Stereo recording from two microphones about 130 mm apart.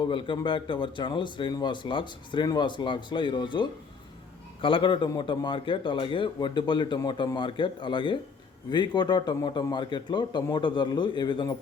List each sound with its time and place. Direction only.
0.0 s a man's voice: 40° left (ahead or behind)